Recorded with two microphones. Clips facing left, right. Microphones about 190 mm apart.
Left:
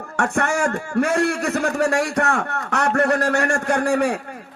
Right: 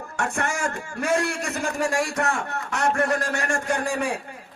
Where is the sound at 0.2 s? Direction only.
65° left (ahead or behind).